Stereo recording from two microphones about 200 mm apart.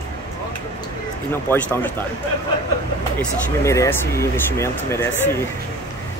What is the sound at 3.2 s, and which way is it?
Speech, 15° left (ahead or behind).